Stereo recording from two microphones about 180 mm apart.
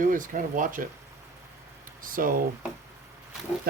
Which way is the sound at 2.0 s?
50° right (ahead or behind).